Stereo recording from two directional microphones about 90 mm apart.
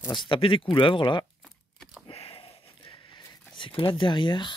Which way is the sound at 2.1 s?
85° left.